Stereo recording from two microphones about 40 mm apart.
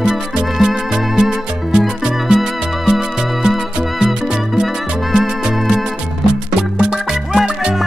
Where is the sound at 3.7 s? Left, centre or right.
Centre.